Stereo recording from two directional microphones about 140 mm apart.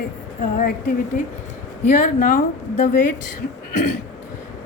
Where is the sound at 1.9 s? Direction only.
75° left (ahead or behind).